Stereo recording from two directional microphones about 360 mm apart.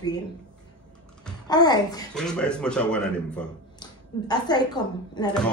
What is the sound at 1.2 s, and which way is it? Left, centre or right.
A child's voice, centre.